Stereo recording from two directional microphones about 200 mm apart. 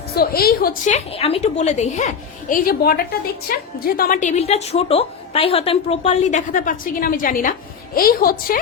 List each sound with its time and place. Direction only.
0.1 s a woman's voice: 50° left (ahead or behind)